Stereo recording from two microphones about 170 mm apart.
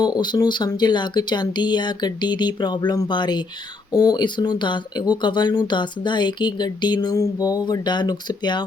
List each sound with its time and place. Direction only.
0.0 s speech: 25° left (ahead or behind)